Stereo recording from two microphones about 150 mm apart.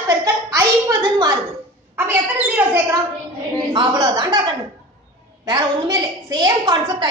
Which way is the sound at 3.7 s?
30° right (ahead or behind).